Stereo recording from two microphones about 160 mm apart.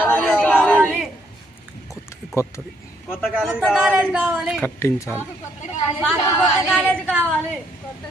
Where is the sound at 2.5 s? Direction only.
15° left (ahead or behind).